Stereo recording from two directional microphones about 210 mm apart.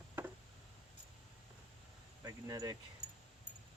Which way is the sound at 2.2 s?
15° right (ahead or behind).